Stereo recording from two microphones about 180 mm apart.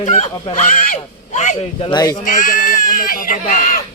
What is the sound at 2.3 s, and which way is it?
Speech, 50° left (ahead or behind).